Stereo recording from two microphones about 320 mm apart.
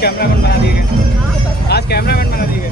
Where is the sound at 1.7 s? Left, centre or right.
Left.